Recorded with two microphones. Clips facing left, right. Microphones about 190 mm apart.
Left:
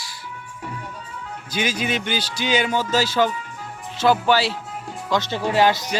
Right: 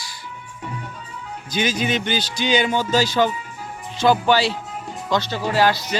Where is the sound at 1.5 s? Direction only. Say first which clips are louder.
Right 2 dB; 10° left (ahead or behind).